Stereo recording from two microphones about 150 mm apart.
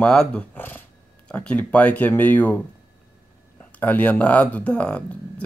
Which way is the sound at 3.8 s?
10° left (ahead or behind).